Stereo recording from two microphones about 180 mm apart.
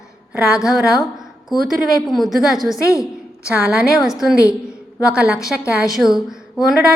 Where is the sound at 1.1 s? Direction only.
Centre (ahead or behind).